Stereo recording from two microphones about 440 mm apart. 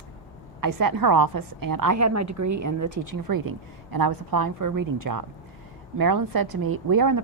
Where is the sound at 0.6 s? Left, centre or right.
Right.